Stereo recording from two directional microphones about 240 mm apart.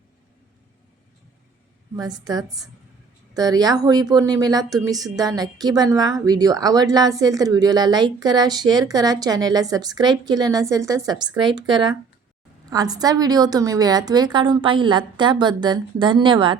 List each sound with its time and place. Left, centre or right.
2.0 s a woman's voice: centre